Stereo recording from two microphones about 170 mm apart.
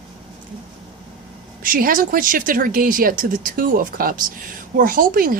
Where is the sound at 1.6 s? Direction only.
55° right (ahead or behind).